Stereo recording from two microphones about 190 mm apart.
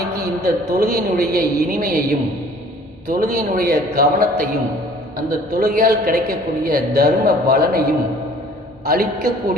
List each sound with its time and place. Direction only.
0.4 s a man's voice: 55° right (ahead or behind)